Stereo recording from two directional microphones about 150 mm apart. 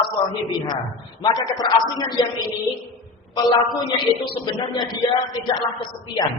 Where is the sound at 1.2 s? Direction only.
25° left (ahead or behind).